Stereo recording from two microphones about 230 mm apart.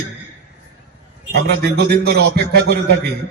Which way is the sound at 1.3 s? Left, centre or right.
Right.